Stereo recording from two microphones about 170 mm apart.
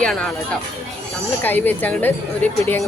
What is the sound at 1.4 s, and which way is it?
Speech, 10° left (ahead or behind).